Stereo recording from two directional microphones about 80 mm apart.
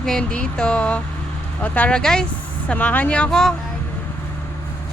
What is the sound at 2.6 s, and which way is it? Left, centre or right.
Speech, centre.